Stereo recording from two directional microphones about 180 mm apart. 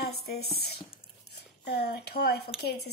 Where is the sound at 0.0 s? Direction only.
60° left (ahead or behind).